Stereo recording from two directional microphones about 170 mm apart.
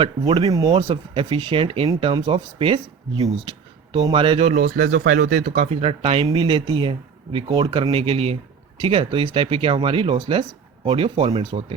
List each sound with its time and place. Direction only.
0.0 s speech: 35° right (ahead or behind)
4.6 s speech: 55° right (ahead or behind)
5.6 s speech: 35° right (ahead or behind)